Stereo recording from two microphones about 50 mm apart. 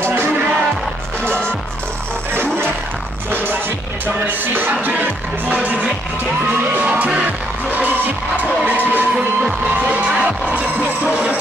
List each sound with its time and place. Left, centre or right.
3.3 s music: right
6.8 s music: right
8.6 s music: right
9.8 s music: right